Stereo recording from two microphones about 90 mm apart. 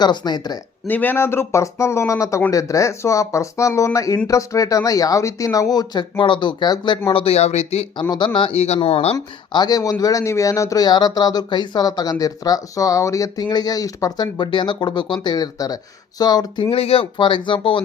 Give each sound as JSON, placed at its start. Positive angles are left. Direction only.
{"t": 0.0, "sound": "speech", "side_deg": 55}
{"t": 0.9, "sound": "speech", "side_deg": 20}
{"t": 7.1, "sound": "speech", "side_deg": 85}
{"t": 8.1, "sound": "speech", "side_deg": 55}
{"t": 9.5, "sound": "speech", "side_deg": 50}
{"t": 14.3, "sound": "speech", "side_deg": 55}
{"t": 16.6, "sound": "speech", "side_deg": 90}